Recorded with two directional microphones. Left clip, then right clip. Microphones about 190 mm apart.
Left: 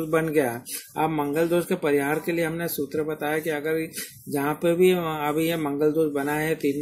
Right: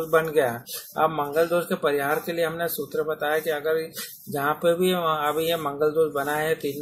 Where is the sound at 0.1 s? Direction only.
45° left (ahead or behind).